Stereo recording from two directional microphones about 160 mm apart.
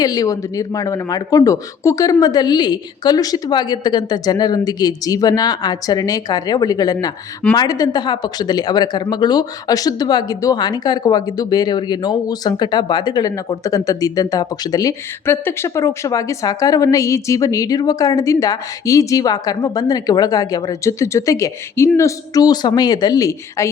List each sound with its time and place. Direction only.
0.0 s speech: 25° left (ahead or behind)